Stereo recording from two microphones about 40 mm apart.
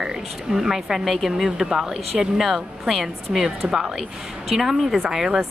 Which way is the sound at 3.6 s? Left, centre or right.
Right.